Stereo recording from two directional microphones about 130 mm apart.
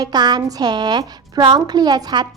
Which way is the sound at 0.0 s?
35° right (ahead or behind).